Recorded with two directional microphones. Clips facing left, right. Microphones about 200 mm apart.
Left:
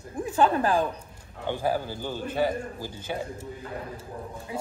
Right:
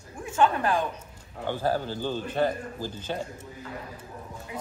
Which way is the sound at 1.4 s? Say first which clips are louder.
Even; 15° left (ahead or behind).